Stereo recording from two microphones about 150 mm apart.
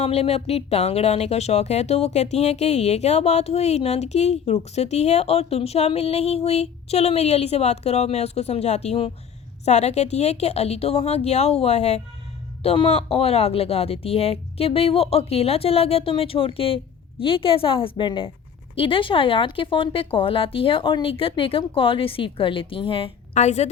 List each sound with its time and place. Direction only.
0.0 s speech: 45° left (ahead or behind)